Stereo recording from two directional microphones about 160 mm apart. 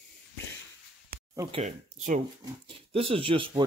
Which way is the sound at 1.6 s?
50° right (ahead or behind).